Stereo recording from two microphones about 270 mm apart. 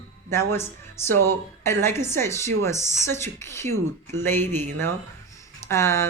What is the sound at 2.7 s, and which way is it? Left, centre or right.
Speech, right.